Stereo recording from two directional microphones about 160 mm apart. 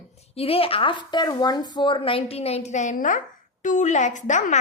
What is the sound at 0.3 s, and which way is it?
A woman's voice, 35° left (ahead or behind).